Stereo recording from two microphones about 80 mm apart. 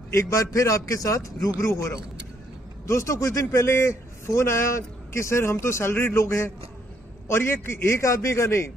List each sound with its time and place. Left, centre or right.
0.1 s a man's voice: left